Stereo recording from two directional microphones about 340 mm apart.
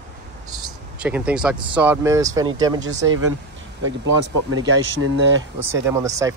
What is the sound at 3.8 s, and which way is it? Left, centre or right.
Speech, right.